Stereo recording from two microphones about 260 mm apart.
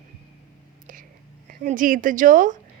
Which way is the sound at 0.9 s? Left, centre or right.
Right.